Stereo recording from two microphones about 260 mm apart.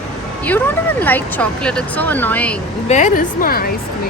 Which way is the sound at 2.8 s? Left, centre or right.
Left.